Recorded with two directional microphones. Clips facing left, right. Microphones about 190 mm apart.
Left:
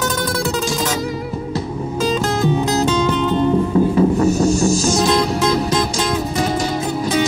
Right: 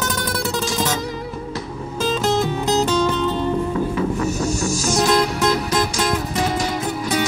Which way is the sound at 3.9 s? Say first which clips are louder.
Left 7 dB; 35° left (ahead or behind).